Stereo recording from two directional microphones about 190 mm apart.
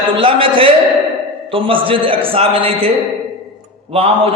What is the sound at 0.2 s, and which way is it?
A man's voice, 30° right (ahead or behind).